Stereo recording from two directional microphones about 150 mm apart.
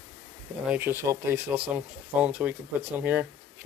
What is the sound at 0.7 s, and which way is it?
Speech, 15° right (ahead or behind).